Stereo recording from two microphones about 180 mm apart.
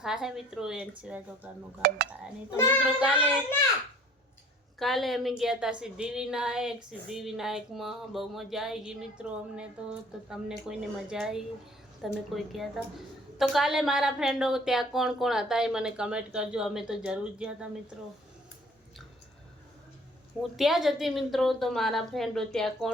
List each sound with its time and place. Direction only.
0.0 s speech: 5° right (ahead or behind)
1.4 s child singing: 5° right (ahead or behind)
1.8 s speech: 65° right (ahead or behind)
2.8 s child singing: 5° right (ahead or behind)
4.8 s speech: centre (ahead or behind)
20.6 s speech: centre (ahead or behind)